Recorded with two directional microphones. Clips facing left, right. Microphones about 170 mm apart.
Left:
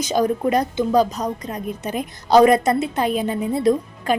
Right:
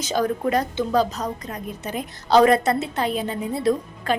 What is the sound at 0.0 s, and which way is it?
A woman's voice, 15° left (ahead or behind).